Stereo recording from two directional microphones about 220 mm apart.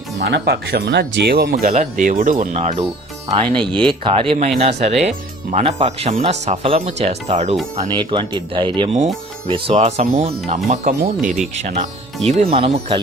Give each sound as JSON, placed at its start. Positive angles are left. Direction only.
{"t": 0.2, "sound": "speech", "side_deg": -50}
{"t": 1.6, "sound": "speech", "side_deg": -35}